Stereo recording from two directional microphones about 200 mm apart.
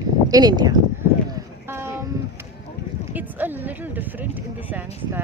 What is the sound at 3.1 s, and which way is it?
Speech, 10° right (ahead or behind).